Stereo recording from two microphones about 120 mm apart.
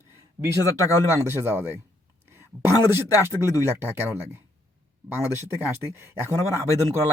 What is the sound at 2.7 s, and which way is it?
Speech, 35° left (ahead or behind).